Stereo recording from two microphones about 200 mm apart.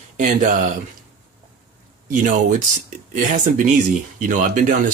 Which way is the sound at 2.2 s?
40° right (ahead or behind).